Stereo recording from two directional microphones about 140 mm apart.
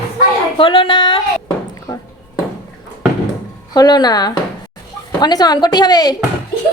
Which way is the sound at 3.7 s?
30° left (ahead or behind).